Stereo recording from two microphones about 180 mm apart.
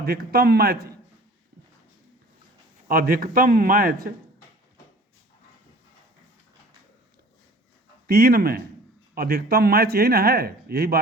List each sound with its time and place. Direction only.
0.0 s speech: 60° right (ahead or behind)
2.8 s a man's voice: 55° right (ahead or behind)
8.0 s speech: 60° right (ahead or behind)